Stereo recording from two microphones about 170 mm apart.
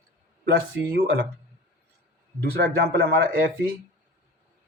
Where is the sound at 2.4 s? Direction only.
65° right (ahead or behind).